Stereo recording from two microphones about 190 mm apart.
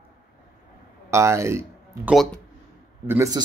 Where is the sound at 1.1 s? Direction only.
15° right (ahead or behind).